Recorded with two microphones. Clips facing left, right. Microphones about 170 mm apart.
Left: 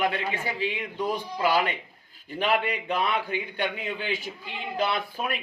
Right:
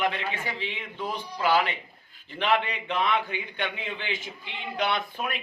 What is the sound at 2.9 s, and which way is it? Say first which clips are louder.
Speech: right 1 dB; 35° left (ahead or behind).